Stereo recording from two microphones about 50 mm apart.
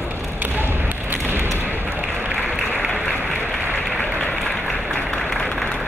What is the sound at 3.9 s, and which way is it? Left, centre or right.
Applause, left.